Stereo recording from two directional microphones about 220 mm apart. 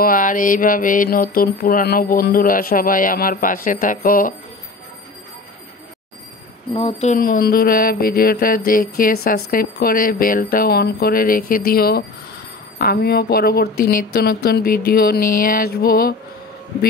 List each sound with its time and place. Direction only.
0.0 s mantra: 40° left (ahead or behind)
6.7 s mantra: 25° left (ahead or behind); by 12.0 s 45° left (ahead or behind)
12.7 s speech: 45° left (ahead or behind)